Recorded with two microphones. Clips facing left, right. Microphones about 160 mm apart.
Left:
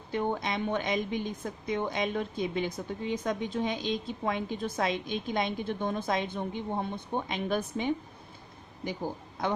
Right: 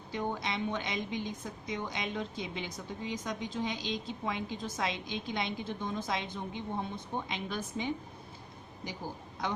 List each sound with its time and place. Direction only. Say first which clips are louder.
0.1 s a woman's voice: left 5 dB; 55° left (ahead or behind)